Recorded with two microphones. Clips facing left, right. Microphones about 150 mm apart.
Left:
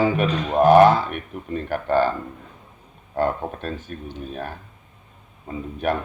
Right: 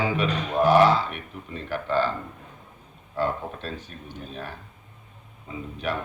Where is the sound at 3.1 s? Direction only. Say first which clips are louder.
Left 4 dB; 50° left (ahead or behind).